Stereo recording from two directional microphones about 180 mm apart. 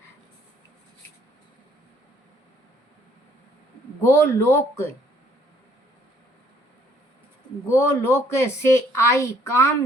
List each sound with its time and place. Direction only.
4.0 s speech: 15° left (ahead or behind)
7.7 s speech: 15° left (ahead or behind)